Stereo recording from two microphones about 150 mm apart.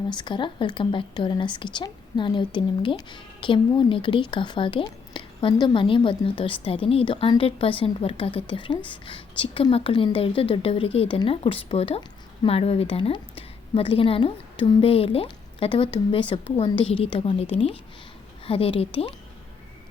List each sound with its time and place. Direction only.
0.1 s a woman's voice: 30° left (ahead or behind)